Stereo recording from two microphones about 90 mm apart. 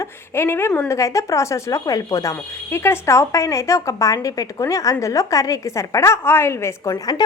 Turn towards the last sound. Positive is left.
turn(degrees=45)  # may be behind; listen again after turning